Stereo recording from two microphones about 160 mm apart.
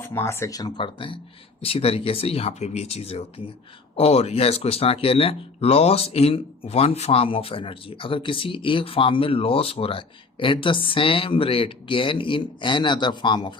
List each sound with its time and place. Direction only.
0.0 s speech: 15° left (ahead or behind)